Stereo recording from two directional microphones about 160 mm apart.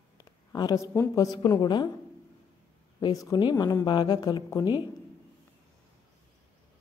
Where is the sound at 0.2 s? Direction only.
25° left (ahead or behind).